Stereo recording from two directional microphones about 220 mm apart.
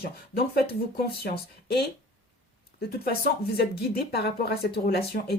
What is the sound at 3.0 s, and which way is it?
A woman's voice, 45° left (ahead or behind).